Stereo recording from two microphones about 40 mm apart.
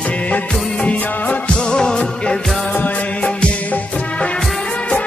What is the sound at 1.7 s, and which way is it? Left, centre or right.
Music, centre.